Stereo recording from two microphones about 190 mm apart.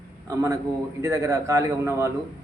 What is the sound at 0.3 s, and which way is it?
Speech, 15° right (ahead or behind).